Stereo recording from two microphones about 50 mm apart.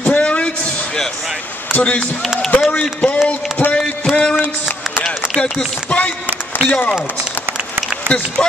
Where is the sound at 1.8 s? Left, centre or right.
Left.